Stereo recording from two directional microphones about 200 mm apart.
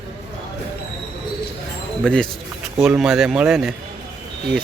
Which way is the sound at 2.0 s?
5° left (ahead or behind).